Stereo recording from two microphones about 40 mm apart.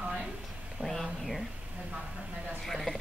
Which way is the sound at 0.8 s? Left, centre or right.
Centre.